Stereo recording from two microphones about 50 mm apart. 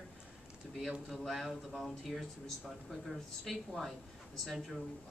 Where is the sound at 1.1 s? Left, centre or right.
Centre.